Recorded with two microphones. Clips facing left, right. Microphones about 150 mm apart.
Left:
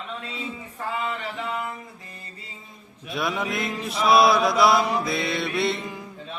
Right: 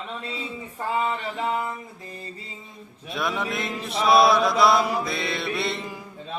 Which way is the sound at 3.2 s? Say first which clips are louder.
Left 1 dB; centre (ahead or behind).